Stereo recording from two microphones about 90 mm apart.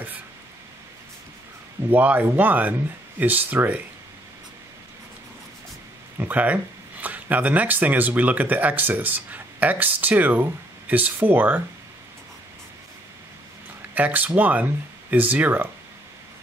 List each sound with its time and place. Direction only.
1.9 s speech: 20° right (ahead or behind)
6.1 s speech: 20° right (ahead or behind)
13.9 s speech: 20° right (ahead or behind)